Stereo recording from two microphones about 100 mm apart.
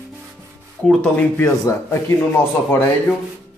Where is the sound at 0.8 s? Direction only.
15° left (ahead or behind).